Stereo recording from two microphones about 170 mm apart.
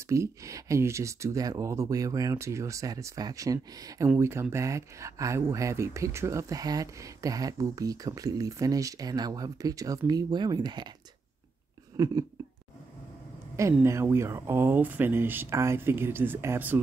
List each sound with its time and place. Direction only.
0.1 s speech: 20° right (ahead or behind)
11.9 s speech: 20° right (ahead or behind)
13.8 s speech: 15° right (ahead or behind)